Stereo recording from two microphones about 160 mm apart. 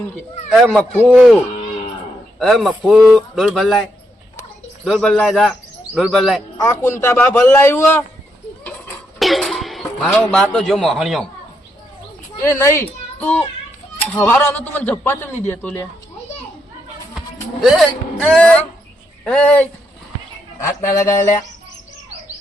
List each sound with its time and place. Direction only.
0.5 s a man's voice: centre (ahead or behind)
2.4 s a man's voice: centre (ahead or behind)
4.9 s a man's voice: 5° left (ahead or behind)
6.6 s a man's voice: 15° left (ahead or behind)
9.1 s cough: centre (ahead or behind)
10.3 s a man's voice: 5° left (ahead or behind)
12.4 s a man's voice: 15° left (ahead or behind)
17.2 s a man's voice: centre (ahead or behind)